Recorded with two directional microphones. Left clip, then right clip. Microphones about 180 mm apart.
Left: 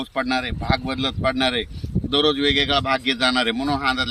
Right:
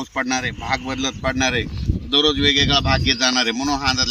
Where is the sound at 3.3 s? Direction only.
50° left (ahead or behind).